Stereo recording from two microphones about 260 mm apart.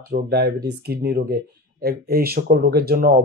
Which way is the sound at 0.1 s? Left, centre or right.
Right.